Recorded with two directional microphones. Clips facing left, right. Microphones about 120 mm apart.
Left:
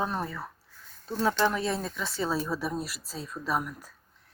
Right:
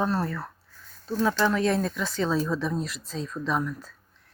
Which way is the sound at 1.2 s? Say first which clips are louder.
Right 2 dB; 25° left (ahead or behind).